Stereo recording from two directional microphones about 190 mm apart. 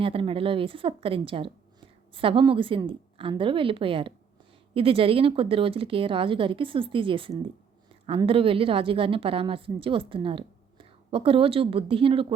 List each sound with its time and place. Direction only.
0.0 s a woman's voice: 30° right (ahead or behind)